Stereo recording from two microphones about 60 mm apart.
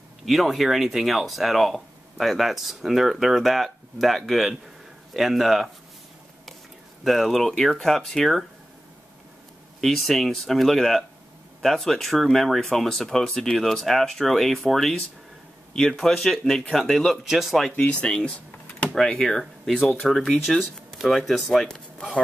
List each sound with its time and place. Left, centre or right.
0.2 s speech: centre
7.1 s speech: centre
9.8 s speech: centre
18.0 s speech: centre